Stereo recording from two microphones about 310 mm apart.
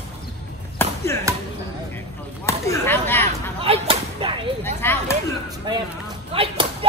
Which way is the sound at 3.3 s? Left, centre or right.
Centre.